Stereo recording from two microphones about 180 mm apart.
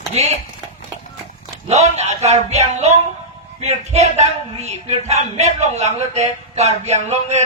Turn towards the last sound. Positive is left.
turn(degrees=-40)  # may be behind; listen again after turning